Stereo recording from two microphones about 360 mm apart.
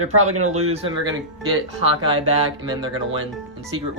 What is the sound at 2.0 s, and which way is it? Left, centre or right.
Speech, centre.